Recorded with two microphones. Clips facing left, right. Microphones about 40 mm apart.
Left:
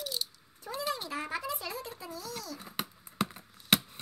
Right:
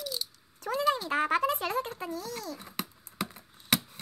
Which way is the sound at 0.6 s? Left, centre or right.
Right.